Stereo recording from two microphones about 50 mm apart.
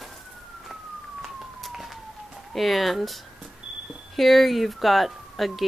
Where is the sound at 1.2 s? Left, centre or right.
Centre.